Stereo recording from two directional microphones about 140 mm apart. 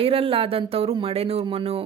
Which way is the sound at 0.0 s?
40° right (ahead or behind).